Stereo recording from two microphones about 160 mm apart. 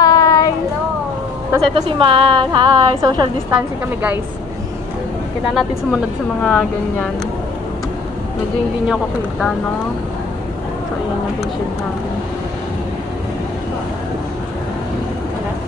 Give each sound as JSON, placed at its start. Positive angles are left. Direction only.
{"t": 0.0, "sound": "a sound", "side_deg": 25}
{"t": 1.6, "sound": "a woman's voice", "side_deg": -35}
{"t": 5.5, "sound": "speech", "side_deg": 0}
{"t": 8.8, "sound": "speech", "side_deg": 0}